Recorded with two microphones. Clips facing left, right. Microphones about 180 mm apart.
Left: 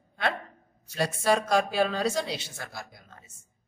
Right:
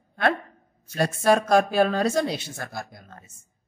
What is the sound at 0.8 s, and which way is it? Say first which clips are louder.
Speech: right 5 dB; 50° right (ahead or behind).